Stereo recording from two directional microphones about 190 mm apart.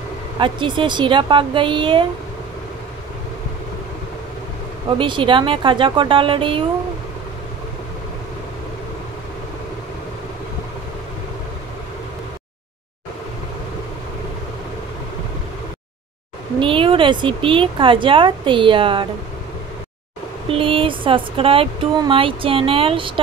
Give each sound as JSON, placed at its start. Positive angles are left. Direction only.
{"t": 0.4, "sound": "speech", "side_deg": -25}
{"t": 4.9, "sound": "speech", "side_deg": -25}
{"t": 16.5, "sound": "speech", "side_deg": -25}
{"t": 20.5, "sound": "speech", "side_deg": -30}